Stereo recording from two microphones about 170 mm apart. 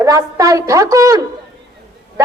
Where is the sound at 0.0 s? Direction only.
20° right (ahead or behind).